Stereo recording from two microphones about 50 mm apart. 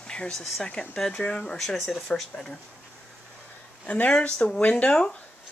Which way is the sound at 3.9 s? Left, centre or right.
Left.